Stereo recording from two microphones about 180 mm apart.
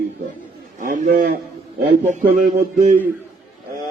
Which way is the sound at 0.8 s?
50° right (ahead or behind).